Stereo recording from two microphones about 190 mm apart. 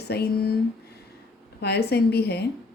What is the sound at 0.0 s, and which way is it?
Speech, 55° left (ahead or behind).